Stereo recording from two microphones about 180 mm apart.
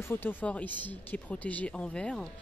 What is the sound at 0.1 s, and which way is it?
Speech, 10° left (ahead or behind).